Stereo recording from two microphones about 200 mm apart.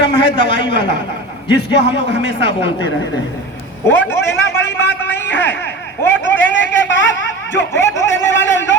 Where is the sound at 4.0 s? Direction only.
10° left (ahead or behind).